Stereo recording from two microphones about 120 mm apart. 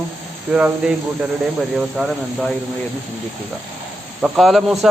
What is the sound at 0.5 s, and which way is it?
Speech, 10° right (ahead or behind).